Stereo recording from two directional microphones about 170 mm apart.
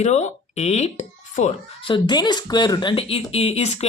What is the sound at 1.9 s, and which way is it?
Speech, 25° left (ahead or behind).